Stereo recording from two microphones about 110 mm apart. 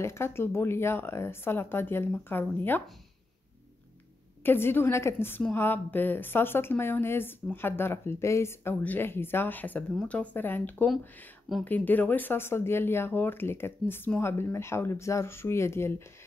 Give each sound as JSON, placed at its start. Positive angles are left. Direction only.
{"t": 0.0, "sound": "speech", "side_deg": 25}
{"t": 4.4, "sound": "speech", "side_deg": 20}